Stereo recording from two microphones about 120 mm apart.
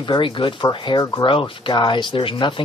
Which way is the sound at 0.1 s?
45° left (ahead or behind).